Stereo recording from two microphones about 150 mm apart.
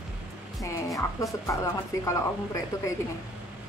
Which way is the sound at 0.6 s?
20° left (ahead or behind).